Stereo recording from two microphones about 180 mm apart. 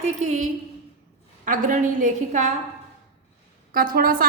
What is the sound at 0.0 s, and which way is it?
Speech, 40° right (ahead or behind).